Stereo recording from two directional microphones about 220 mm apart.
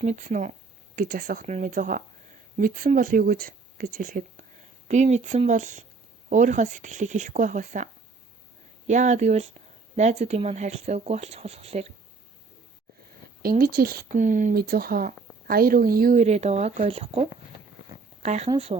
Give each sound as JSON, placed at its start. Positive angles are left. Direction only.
{"t": 0.0, "sound": "speech", "side_deg": -35}
{"t": 8.9, "sound": "speech", "side_deg": -35}
{"t": 13.4, "sound": "speech", "side_deg": -40}